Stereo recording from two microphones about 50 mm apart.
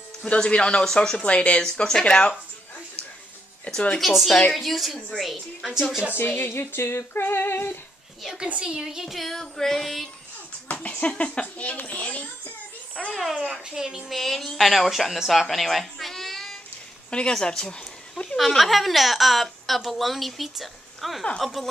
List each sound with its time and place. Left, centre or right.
0.2 s speech: left
3.6 s speech: left
4.0 s a woman's voice: centre
6.2 s speech: left
6.6 s female singing: left
8.5 s a woman's voice: right; by 10.0 s centre
10.7 s a child's voice: left
13.1 s a woman's voice: centre
13.5 s a woman's voice: centre
14.0 s a woman's voice: centre
15.1 s baby cry: centre
17.1 s a woman's voice: centre
18.3 s a woman's voice: centre